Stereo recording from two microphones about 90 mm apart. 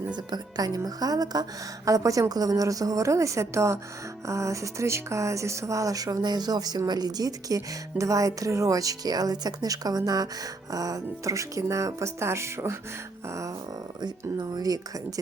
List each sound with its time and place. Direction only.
0.3 s speech: 50° right (ahead or behind); by 12.7 s 30° right (ahead or behind)
14.0 s speech: 50° right (ahead or behind)